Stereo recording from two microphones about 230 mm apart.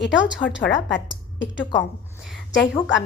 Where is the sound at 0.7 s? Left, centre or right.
Left.